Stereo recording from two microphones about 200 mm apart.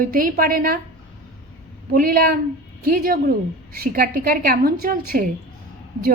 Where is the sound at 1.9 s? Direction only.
45° right (ahead or behind).